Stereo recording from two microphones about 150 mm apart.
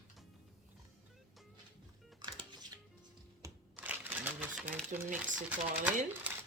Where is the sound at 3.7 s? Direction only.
10° right (ahead or behind).